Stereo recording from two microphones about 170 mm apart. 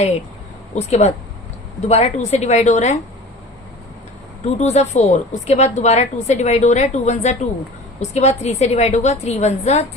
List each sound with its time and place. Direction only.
0.8 s speech: 40° left (ahead or behind)
4.4 s speech: 40° left (ahead or behind)